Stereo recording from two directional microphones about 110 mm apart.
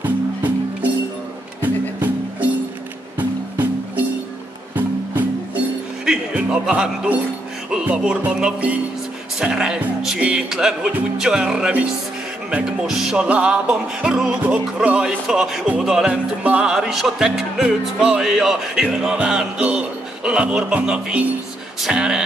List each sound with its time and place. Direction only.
0.0 s music: 15° right (ahead or behind)
6.0 s music: 10° right (ahead or behind)
7.7 s speech: 10° right (ahead or behind)
12.4 s music: 5° right (ahead or behind)
20.2 s speech: 10° right (ahead or behind)
21.8 s music: 5° right (ahead or behind)